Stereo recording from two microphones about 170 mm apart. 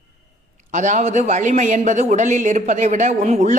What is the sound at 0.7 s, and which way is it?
Speech, 45° right (ahead or behind).